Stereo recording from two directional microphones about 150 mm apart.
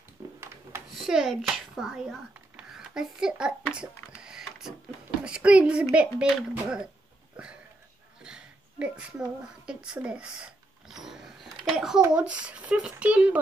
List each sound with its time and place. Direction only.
0.9 s speech: 5° right (ahead or behind)
4.2 s printer: 5° right (ahead or behind)
5.2 s a child's voice: 5° right (ahead or behind)
8.2 s a sound: 5° right (ahead or behind)
12.1 s a child's voice: 10° right (ahead or behind)